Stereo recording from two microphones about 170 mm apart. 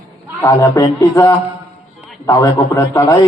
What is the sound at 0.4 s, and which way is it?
A man's voice, 15° left (ahead or behind).